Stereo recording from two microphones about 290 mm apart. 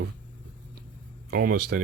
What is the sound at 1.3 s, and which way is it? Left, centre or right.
Speech, right.